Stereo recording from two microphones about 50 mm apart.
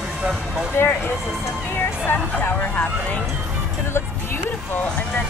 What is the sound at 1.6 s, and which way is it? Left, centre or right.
Music, left.